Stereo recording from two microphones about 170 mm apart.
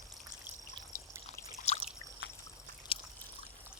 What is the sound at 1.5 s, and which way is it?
Trickle, 40° left (ahead or behind).